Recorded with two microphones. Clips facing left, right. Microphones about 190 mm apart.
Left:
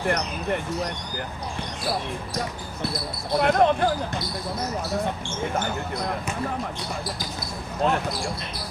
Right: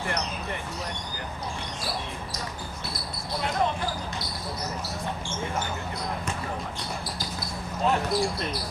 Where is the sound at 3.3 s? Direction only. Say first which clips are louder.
Left 8 dB; 60° left (ahead or behind).